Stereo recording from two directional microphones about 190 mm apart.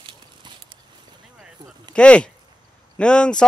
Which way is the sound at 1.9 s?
5° left (ahead or behind).